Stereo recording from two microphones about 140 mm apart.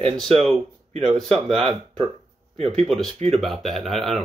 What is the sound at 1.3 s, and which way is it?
Speech, 45° right (ahead or behind).